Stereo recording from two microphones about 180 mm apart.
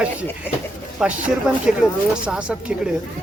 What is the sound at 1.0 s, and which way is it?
Speech, 5° right (ahead or behind).